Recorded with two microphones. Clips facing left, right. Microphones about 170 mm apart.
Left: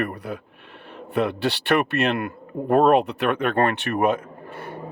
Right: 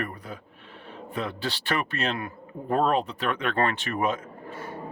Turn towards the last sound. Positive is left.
turn(degrees=65)  # may be behind; listen again after turning